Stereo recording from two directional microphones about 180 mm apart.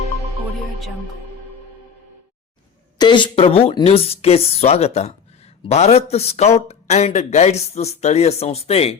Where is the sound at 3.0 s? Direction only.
25° left (ahead or behind).